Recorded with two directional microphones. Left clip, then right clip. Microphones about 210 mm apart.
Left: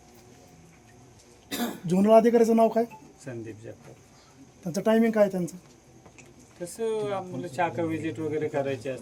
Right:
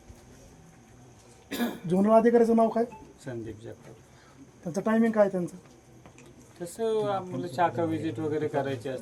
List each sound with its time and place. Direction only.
1.9 s speech: 35° left (ahead or behind)
3.3 s speech: centre (ahead or behind)
4.6 s speech: 30° left (ahead or behind)
6.7 s speech: centre (ahead or behind)